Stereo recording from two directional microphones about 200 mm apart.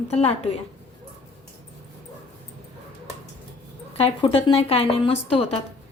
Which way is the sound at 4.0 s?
30° left (ahead or behind).